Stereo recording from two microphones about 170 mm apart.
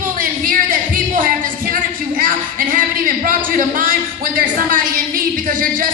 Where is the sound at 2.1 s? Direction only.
55° right (ahead or behind).